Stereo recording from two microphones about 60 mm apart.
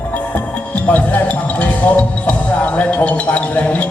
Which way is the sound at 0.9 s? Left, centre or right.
Left.